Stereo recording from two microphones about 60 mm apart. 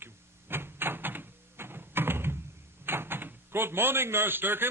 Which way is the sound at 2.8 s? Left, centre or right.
Right.